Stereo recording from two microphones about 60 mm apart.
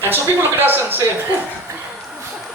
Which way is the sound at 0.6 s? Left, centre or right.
Right.